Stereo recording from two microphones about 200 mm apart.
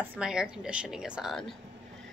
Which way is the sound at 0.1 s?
5° right (ahead or behind).